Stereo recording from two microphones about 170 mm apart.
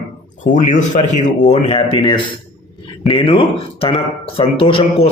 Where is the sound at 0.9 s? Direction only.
50° left (ahead or behind).